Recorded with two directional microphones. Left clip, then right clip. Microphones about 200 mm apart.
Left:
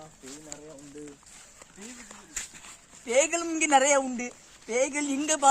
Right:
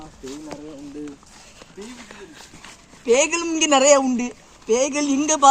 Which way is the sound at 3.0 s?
20° left (ahead or behind).